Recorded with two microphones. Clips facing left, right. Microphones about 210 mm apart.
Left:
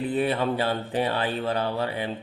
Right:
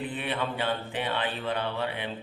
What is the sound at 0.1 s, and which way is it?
Speech, 40° left (ahead or behind).